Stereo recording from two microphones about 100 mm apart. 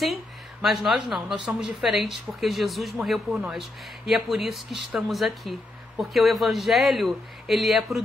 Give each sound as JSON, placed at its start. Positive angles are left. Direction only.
{"t": 0.0, "sound": "speech", "side_deg": 0}